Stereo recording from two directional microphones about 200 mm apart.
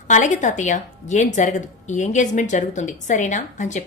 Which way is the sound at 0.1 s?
40° left (ahead or behind).